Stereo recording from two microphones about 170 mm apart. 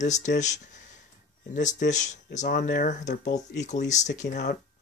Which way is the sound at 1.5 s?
45° left (ahead or behind).